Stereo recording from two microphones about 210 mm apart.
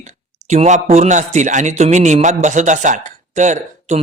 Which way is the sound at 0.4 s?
35° right (ahead or behind).